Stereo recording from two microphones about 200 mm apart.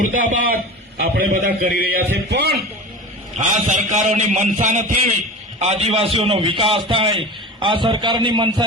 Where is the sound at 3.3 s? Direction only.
35° right (ahead or behind).